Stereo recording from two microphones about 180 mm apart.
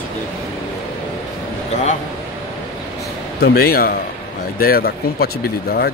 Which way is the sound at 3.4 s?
55° left (ahead or behind).